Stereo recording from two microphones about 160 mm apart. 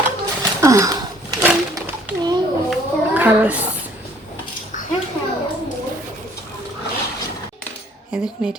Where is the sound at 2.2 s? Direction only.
25° right (ahead or behind).